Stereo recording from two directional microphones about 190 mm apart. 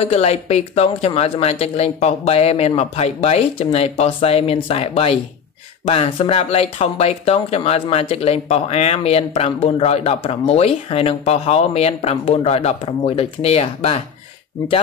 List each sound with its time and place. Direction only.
0.0 s speech: 35° left (ahead or behind)